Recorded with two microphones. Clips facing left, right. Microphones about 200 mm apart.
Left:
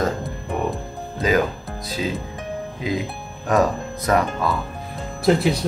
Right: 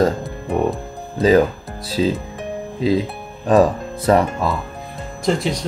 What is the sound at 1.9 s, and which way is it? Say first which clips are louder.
Speech: right 7 dB; 30° right (ahead or behind).